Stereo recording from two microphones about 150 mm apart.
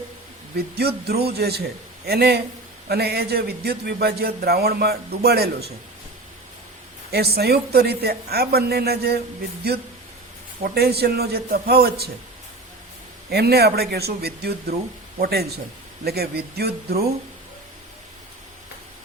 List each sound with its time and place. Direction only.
0.5 s a man's voice: 90° right
7.1 s a man's voice: 90° right
10.6 s a man's voice: 90° right
13.3 s a man's voice: 90° right